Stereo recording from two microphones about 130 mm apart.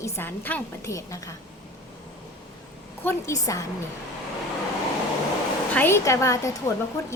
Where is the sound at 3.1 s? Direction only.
25° left (ahead or behind).